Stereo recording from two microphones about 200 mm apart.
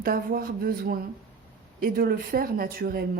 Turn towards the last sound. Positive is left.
turn(degrees=-50)  # may be behind; listen again after turning